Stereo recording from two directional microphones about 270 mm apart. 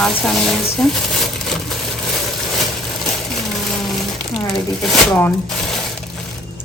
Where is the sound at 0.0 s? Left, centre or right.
Centre.